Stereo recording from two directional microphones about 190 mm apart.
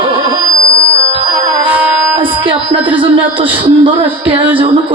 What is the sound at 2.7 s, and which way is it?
Speech, 10° right (ahead or behind).